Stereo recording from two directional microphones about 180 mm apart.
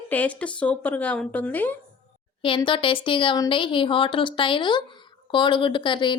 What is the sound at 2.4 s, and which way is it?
A woman's voice, 30° left (ahead or behind).